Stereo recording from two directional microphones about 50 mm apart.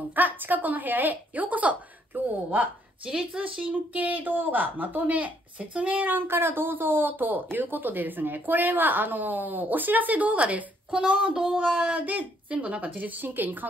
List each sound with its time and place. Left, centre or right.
0.1 s speech: right
2.1 s a sound: right
3.1 s speech: right
6.2 s speech: right